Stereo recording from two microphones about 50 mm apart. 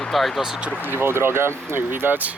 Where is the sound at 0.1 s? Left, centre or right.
Centre.